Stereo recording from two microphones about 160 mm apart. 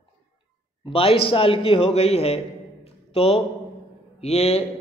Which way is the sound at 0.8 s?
35° left (ahead or behind).